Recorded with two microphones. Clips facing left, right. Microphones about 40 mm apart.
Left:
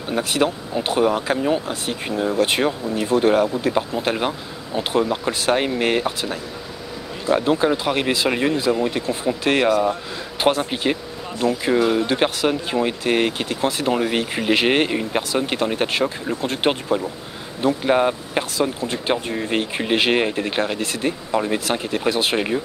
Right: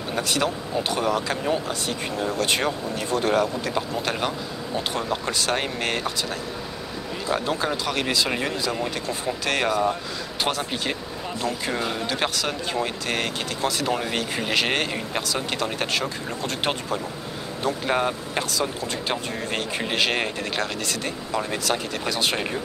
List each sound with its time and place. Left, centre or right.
0.1 s speech: centre